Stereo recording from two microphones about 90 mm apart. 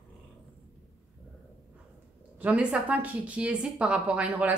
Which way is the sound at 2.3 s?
15° right (ahead or behind).